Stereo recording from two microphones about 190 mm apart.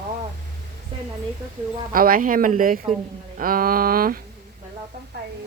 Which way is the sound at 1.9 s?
50° right (ahead or behind).